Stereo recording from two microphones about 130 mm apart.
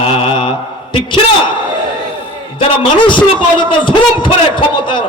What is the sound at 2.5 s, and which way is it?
A man's voice, 40° left (ahead or behind).